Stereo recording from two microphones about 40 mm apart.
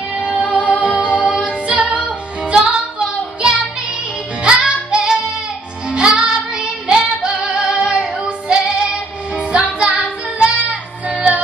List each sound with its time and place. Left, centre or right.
0.2 s music: right
4.4 s music: right